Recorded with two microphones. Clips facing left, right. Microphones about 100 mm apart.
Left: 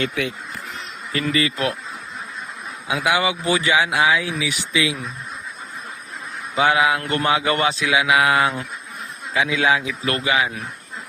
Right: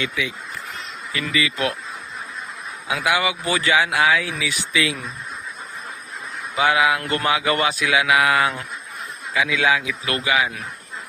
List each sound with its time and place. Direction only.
0.1 s speech: 55° left (ahead or behind)
1.1 s speech: 40° left (ahead or behind)
2.8 s speech: 20° left (ahead or behind)
6.6 s speech: 25° left (ahead or behind)